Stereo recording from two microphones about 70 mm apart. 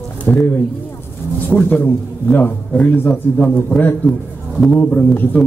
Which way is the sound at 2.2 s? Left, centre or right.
Left.